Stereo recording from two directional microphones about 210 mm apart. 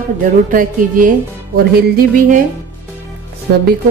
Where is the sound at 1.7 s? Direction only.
45° right (ahead or behind).